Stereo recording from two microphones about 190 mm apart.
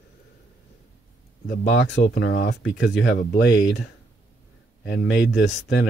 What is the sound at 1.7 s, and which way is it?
Speech, 70° left (ahead or behind).